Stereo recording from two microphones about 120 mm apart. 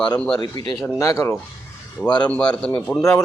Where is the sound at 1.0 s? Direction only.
25° left (ahead or behind).